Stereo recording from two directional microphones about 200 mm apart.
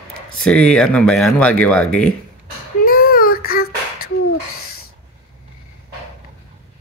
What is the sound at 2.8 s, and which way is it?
Child singing, 50° left (ahead or behind).